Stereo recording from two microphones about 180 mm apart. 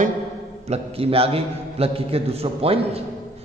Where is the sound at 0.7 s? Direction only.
30° right (ahead or behind).